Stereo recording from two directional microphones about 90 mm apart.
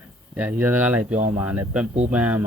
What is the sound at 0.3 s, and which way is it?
Speech, 20° right (ahead or behind).